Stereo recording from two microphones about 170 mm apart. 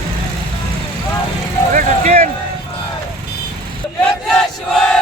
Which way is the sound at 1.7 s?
50° right (ahead or behind).